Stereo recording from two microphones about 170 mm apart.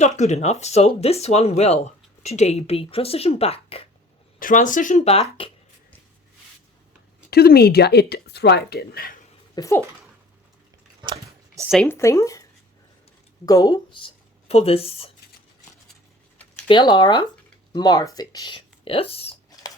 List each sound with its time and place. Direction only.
0.0 s speech: 40° left (ahead or behind)
4.4 s speech: 50° left (ahead or behind)
7.3 s speech: 70° left (ahead or behind)
9.6 s speech: 15° left (ahead or behind)
11.9 s speech: 15° left (ahead or behind)
13.4 s speech: 20° left (ahead or behind)
16.6 s speech: 30° left (ahead or behind)